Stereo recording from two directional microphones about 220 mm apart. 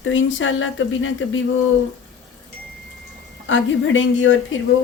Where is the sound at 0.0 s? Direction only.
60° left (ahead or behind).